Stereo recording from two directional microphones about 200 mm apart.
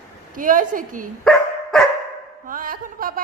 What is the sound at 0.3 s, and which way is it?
Speech, 40° right (ahead or behind).